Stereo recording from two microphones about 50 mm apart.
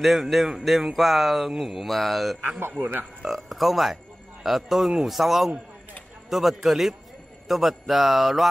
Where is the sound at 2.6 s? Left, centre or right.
Right.